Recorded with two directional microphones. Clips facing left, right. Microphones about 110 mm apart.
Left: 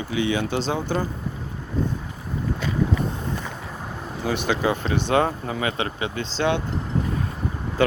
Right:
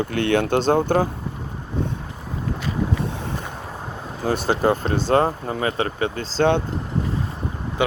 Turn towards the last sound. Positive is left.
turn(degrees=-15)  # may be behind; listen again after turning